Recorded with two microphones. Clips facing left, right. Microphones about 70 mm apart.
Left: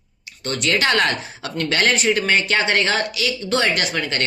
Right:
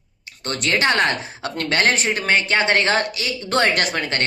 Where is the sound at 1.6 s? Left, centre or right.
Right.